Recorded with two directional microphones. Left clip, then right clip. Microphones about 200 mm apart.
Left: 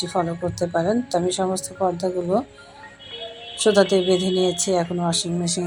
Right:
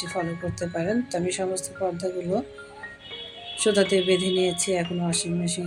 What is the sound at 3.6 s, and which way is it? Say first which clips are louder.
Speech: left 4 dB; centre (ahead or behind).